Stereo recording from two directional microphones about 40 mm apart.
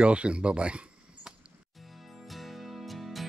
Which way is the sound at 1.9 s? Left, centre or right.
Centre.